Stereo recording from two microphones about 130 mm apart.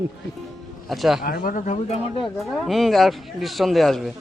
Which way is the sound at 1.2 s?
90° left.